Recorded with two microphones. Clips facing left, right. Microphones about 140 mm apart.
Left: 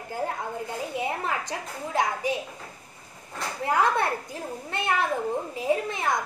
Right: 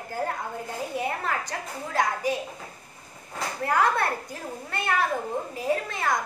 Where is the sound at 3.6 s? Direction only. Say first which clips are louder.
Even; 20° left (ahead or behind).